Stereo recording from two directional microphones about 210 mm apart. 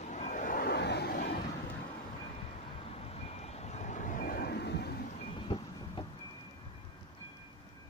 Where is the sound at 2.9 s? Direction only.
30° left (ahead or behind); by 5.1 s 50° left (ahead or behind).